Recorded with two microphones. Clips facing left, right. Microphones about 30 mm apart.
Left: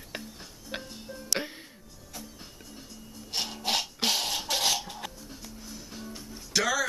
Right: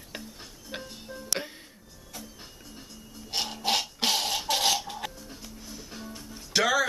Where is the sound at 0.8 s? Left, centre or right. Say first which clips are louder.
Even; centre.